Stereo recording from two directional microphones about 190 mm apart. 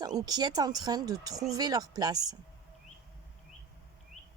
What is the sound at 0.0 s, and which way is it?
Speech, 20° right (ahead or behind).